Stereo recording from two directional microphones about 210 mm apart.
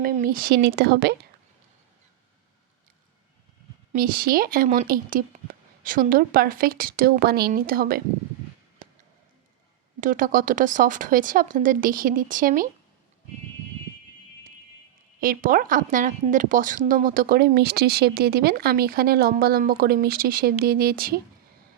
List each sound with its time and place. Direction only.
0.0 s speech: 40° right (ahead or behind)
3.9 s speech: 40° right (ahead or behind)
10.0 s speech: 40° right (ahead or behind)
15.2 s speech: 40° right (ahead or behind)